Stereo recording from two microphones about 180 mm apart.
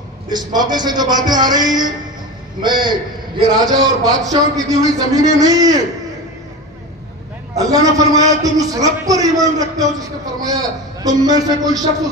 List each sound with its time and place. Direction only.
0.3 s a man's voice: 25° right (ahead or behind)
7.5 s a man's voice: 20° right (ahead or behind)